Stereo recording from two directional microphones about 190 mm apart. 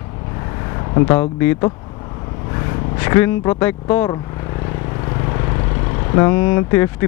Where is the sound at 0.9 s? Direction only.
30° left (ahead or behind).